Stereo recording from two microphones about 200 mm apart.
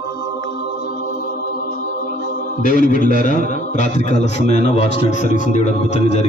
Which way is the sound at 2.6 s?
40° left (ahead or behind).